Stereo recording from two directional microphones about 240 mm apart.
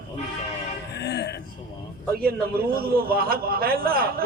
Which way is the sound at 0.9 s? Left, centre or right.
Left.